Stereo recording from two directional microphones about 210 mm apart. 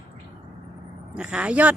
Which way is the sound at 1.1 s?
5° right (ahead or behind).